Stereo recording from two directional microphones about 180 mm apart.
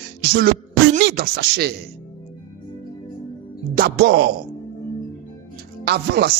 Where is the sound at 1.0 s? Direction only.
65° right (ahead or behind).